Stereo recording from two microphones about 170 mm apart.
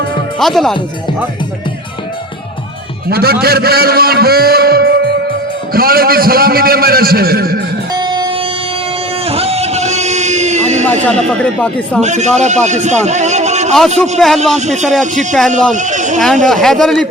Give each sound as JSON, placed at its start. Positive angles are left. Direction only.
{"t": 0.3, "sound": "a man's voice", "side_deg": 0}
{"t": 3.1, "sound": "a man's voice", "side_deg": -65}
{"t": 7.9, "sound": "music", "side_deg": -25}
{"t": 9.2, "sound": "a sound", "side_deg": -35}
{"t": 11.0, "sound": "speech", "side_deg": 5}
{"t": 12.0, "sound": "speech", "side_deg": -45}
{"t": 14.2, "sound": "a man's voice", "side_deg": 0}
{"t": 14.6, "sound": "a man's voice", "side_deg": -45}
{"t": 16.2, "sound": "a man's voice", "side_deg": 0}